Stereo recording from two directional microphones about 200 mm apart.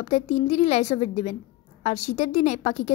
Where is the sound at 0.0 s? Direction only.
30° left (ahead or behind).